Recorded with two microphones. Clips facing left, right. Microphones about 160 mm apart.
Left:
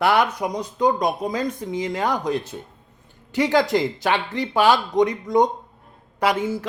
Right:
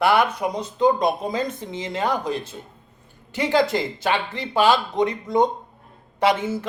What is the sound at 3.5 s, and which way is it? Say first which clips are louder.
Speech: even; 20° left (ahead or behind).